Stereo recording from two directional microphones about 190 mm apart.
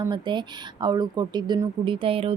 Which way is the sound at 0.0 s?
25° right (ahead or behind).